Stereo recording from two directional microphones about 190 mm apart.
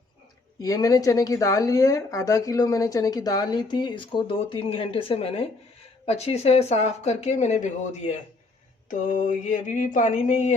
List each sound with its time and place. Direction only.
0.6 s speech: 20° left (ahead or behind); by 10.5 s 40° left (ahead or behind)